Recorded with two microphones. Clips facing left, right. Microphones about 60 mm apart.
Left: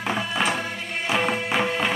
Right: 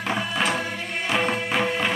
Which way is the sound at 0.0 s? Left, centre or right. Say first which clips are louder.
Even; centre.